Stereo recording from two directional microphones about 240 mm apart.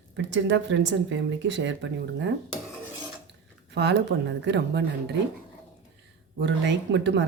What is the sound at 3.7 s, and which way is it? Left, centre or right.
Speech, right.